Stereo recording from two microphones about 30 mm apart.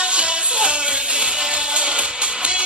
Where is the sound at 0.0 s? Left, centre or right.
Right.